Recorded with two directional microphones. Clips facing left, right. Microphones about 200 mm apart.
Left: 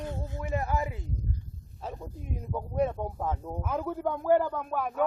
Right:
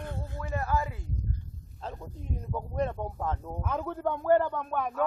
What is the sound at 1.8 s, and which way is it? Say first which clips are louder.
A man's voice: left 1 dB; 10° left (ahead or behind).